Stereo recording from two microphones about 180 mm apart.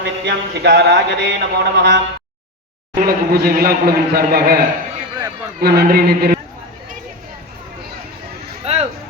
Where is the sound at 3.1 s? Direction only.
60° right (ahead or behind).